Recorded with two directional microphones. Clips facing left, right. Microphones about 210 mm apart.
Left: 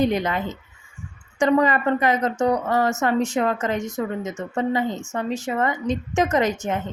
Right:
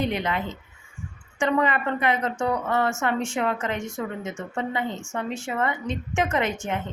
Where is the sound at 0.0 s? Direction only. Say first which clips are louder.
Left 5 dB; 40° left (ahead or behind).